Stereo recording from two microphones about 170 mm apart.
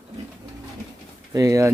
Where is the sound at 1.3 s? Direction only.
20° right (ahead or behind).